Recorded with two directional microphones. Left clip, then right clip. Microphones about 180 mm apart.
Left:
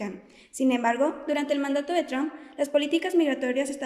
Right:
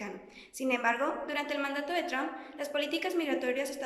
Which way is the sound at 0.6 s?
45° left (ahead or behind).